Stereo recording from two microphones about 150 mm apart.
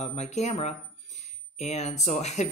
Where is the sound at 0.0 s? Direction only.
50° left (ahead or behind).